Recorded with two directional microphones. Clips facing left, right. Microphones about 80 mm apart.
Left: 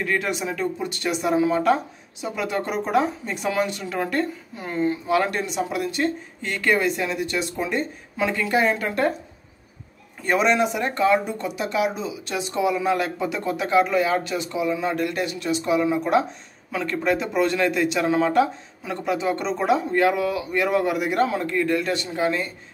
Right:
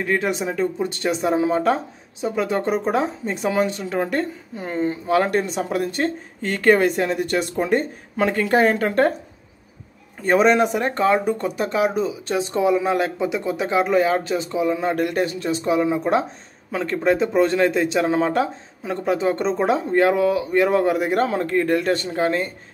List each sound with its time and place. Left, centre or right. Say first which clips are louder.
0.0 s a man's voice: right 3 dB; right
10.2 s a man's voice: right 4 dB; right